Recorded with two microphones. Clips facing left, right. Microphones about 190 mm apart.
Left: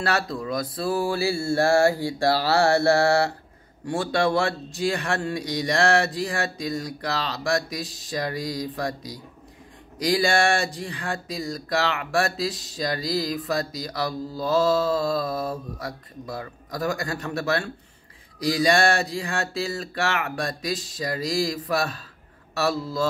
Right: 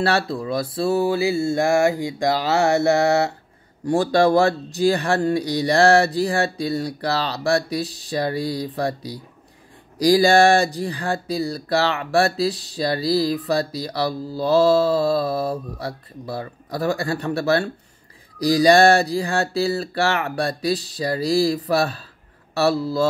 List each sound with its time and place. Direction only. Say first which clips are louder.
0.0 s mantra: right 5 dB; 30° right (ahead or behind)
3.8 s speech: right 6 dB; 40° right (ahead or behind)